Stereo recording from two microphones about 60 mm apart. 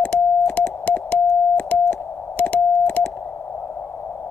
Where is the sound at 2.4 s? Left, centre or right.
Left.